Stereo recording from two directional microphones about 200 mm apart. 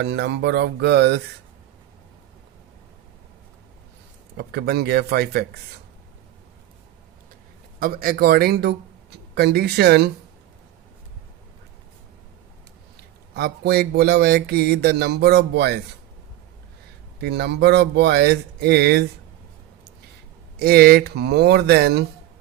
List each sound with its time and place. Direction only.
0.0 s speech: 60° right (ahead or behind)
4.4 s speech: 55° right (ahead or behind)
7.8 s speech: 45° right (ahead or behind)
13.3 s speech: 55° right (ahead or behind)
17.2 s speech: 55° right (ahead or behind)
20.6 s speech: 50° right (ahead or behind)